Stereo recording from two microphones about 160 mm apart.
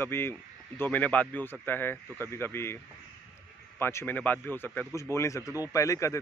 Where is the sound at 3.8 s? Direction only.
15° left (ahead or behind).